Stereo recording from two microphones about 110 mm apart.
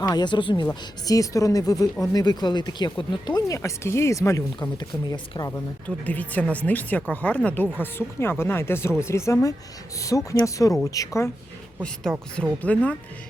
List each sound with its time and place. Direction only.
0.0 s speech: 40° left (ahead or behind)
1.0 s speech: 30° left (ahead or behind)
3.5 s speech: 30° left (ahead or behind)
4.8 s speech: 45° left (ahead or behind)
6.1 s a woman's voice: 15° left (ahead or behind); by 11.3 s 30° left (ahead or behind)
12.4 s a woman's voice: 10° left (ahead or behind)